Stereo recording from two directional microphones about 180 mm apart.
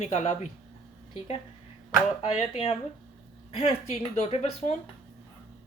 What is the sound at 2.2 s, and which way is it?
Speech, 35° left (ahead or behind).